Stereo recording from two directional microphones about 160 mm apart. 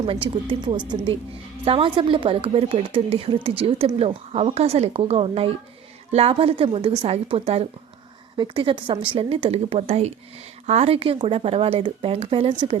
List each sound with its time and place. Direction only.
0.0 s a woman's voice: 35° right (ahead or behind)